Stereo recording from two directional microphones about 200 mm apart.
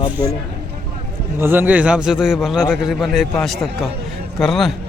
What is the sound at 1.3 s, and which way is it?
A man's voice, 10° right (ahead or behind).